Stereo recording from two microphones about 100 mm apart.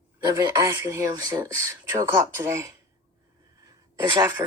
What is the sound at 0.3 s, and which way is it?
Speech, 35° right (ahead or behind).